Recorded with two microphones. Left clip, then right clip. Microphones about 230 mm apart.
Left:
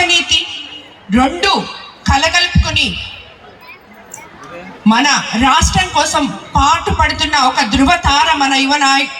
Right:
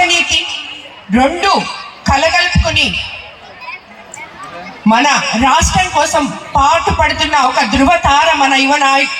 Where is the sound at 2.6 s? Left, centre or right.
Right.